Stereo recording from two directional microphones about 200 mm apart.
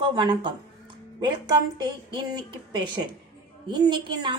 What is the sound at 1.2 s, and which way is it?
A woman's voice, 20° right (ahead or behind).